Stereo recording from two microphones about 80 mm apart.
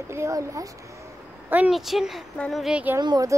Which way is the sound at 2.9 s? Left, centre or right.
Right.